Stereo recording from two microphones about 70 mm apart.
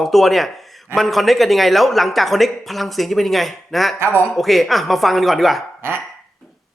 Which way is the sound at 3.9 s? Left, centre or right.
Right.